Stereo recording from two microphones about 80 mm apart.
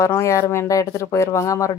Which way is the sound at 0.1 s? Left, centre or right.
Left.